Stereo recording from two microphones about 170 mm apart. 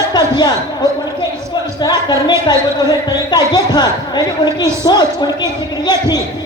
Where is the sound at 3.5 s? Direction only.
25° left (ahead or behind).